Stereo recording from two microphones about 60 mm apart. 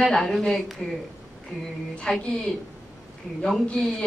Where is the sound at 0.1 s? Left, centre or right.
Centre.